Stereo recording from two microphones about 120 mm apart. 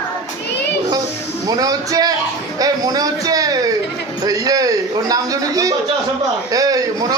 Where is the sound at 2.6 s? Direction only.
30° right (ahead or behind).